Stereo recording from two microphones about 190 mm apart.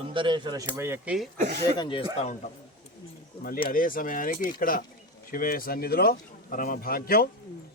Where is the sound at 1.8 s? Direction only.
25° left (ahead or behind).